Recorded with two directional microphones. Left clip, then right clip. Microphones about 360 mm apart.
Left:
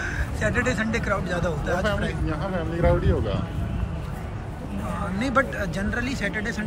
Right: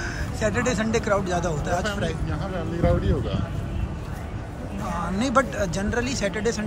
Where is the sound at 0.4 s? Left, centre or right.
Centre.